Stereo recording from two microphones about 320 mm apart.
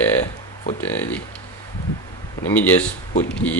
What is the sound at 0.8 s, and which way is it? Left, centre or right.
Speech, centre.